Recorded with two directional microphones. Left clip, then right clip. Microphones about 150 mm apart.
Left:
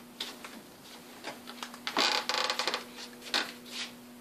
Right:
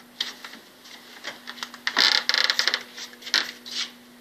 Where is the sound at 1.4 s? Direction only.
30° left (ahead or behind).